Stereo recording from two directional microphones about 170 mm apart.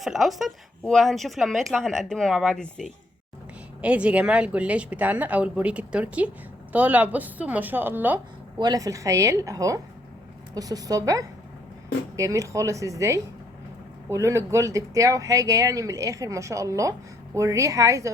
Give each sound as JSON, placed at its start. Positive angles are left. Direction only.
{"t": 0.0, "sound": "speech", "side_deg": 0}
{"t": 8.5, "sound": "speech", "side_deg": -25}